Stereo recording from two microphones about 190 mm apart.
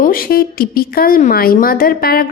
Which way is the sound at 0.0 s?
50° left (ahead or behind).